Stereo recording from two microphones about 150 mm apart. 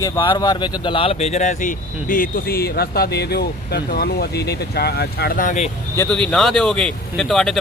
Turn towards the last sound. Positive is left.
turn(degrees=0)  # may be behind; listen again after turning